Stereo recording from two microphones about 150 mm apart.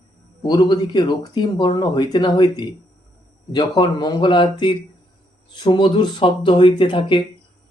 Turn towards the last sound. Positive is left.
turn(degrees=35)  # may be behind; listen again after turning